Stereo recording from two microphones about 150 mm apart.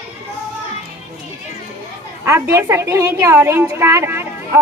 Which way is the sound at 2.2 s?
20° right (ahead or behind).